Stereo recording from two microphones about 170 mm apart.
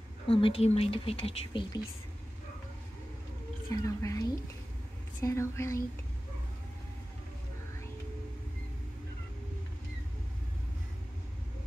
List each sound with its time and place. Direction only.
0.3 s speech: 35° left (ahead or behind)
3.7 s speech: 20° left (ahead or behind)
5.2 s speech: 15° left (ahead or behind)